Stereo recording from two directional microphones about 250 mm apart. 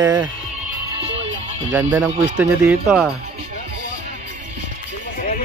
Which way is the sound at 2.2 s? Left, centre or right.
Centre.